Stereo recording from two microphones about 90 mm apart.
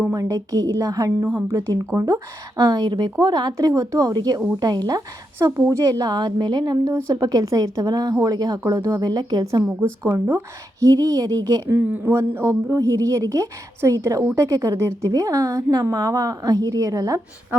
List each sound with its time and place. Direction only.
0.1 s a woman's voice: 45° right (ahead or behind)
5.5 s speech: 25° right (ahead or behind)
5.8 s speech: 45° right (ahead or behind)
10.1 s a woman's voice: 30° right (ahead or behind)
11.8 s a woman's voice: 20° right (ahead or behind); by 17.2 s 40° right (ahead or behind)